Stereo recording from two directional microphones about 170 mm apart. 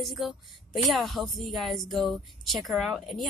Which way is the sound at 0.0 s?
Centre (ahead or behind).